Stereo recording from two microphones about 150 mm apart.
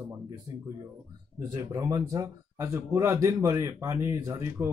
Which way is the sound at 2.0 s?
20° right (ahead or behind).